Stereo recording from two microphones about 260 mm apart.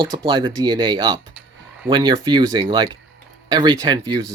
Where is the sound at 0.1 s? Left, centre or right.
Centre.